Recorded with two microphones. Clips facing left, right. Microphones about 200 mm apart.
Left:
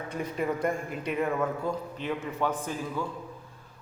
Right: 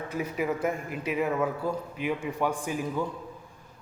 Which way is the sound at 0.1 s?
5° right (ahead or behind).